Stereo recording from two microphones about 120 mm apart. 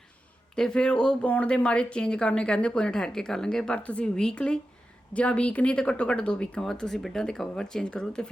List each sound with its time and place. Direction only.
0.5 s speech: 5° left (ahead or behind)